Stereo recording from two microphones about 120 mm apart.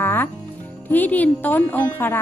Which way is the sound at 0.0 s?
15° left (ahead or behind).